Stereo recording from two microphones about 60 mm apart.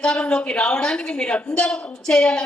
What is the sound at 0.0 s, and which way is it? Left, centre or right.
A woman's voice, centre.